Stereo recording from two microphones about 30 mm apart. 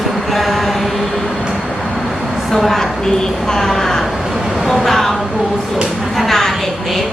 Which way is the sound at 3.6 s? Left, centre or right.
Centre.